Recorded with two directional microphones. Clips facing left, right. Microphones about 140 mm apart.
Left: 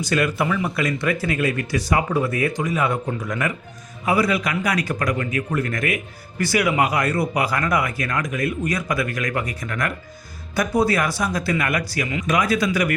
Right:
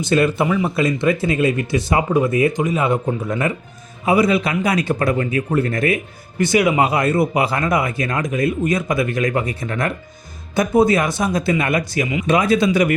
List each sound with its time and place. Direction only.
0.0 s speech: 25° right (ahead or behind)